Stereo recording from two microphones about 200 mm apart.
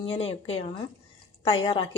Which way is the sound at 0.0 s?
25° left (ahead or behind).